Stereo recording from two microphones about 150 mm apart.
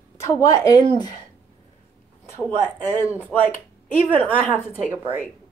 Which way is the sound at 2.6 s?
15° left (ahead or behind).